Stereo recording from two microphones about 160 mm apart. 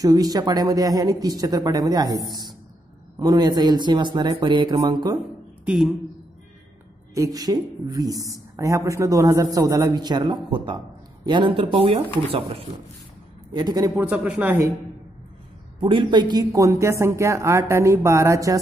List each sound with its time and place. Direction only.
0.0 s speech: 25° right (ahead or behind)
5.7 s a woman's voice: 5° right (ahead or behind)
7.2 s speech: 25° right (ahead or behind)
13.9 s speech: 10° right (ahead or behind)
15.8 s speech: 30° right (ahead or behind)